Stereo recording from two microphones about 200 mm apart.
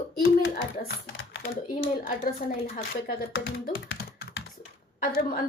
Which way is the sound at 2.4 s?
40° left (ahead or behind).